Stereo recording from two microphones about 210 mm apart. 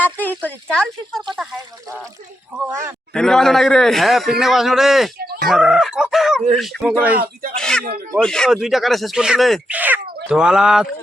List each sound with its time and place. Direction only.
0.0 s speech: 10° left (ahead or behind)
2.6 s a man's voice: 15° right (ahead or behind)
3.1 s a man's voice: centre (ahead or behind)
5.1 s goat: 45° right (ahead or behind)
5.5 s a man's voice: centre (ahead or behind)